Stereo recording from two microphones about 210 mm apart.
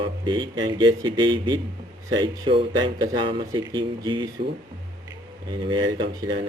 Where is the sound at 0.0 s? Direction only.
20° right (ahead or behind).